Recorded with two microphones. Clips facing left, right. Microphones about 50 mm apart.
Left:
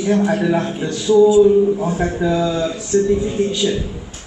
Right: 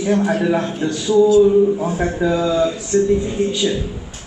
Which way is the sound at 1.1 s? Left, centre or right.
Left.